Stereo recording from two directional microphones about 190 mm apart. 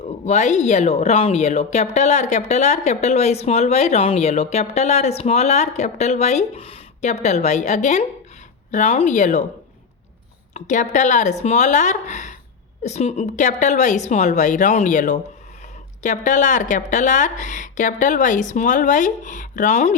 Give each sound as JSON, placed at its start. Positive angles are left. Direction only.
{"t": 0.3, "sound": "a woman's voice", "side_deg": 35}
{"t": 10.5, "sound": "a woman's voice", "side_deg": 40}